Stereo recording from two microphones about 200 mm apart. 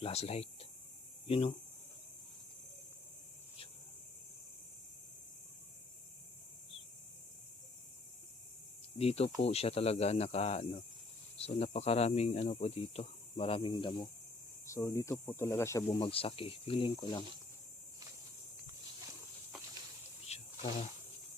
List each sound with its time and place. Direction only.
0.0 s speech: 30° left (ahead or behind)
9.0 s speech: 30° left (ahead or behind); by 16.0 s 15° left (ahead or behind)
16.0 s speech: 30° left (ahead or behind)
20.2 s snake: 30° left (ahead or behind)